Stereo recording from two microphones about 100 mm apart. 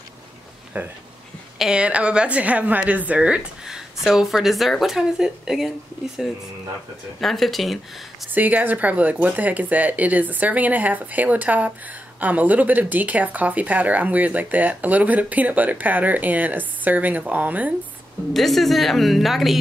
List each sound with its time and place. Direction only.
0.7 s speech: 15° right (ahead or behind)
7.2 s a woman's voice: centre (ahead or behind)
8.3 s speech: 15° right (ahead or behind)
18.3 s a woman's voice: centre (ahead or behind)